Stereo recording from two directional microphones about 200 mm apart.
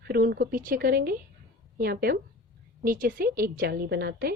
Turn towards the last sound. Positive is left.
turn(degrees=-50)  # may be behind; listen again after turning